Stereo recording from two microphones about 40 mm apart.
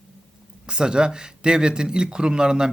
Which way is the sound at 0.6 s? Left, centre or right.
Right.